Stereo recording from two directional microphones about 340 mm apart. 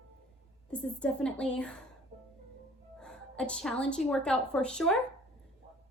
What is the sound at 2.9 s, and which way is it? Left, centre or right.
A woman's voice, centre.